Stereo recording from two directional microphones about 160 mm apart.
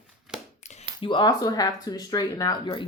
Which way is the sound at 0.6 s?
45° left (ahead or behind).